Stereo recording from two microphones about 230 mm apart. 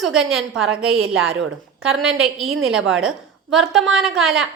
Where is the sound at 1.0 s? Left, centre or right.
Right.